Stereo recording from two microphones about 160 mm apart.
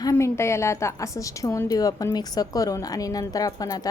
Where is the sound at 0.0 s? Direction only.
20° left (ahead or behind).